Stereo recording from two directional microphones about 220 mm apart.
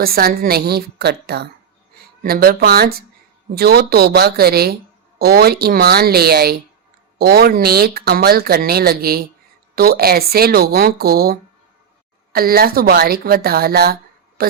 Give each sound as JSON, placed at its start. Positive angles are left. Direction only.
{"t": 0.0, "sound": "speech", "side_deg": -45}